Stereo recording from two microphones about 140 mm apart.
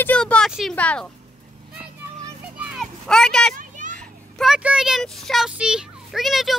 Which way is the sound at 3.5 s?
70° right (ahead or behind).